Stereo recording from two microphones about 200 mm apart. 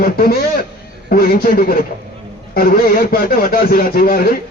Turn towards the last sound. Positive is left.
turn(degrees=45)  # may be behind; listen again after turning